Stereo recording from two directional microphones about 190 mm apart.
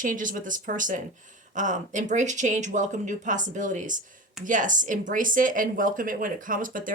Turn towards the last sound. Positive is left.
turn(degrees=-45)  # may be behind; listen again after turning